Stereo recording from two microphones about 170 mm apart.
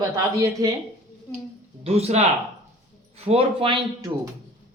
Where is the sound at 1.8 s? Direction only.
35° right (ahead or behind).